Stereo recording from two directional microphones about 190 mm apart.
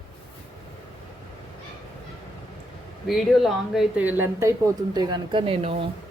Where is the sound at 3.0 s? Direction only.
Centre (ahead or behind); by 5.8 s 30° right (ahead or behind).